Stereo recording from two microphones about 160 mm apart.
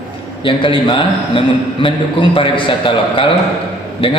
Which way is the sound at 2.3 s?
30° left (ahead or behind).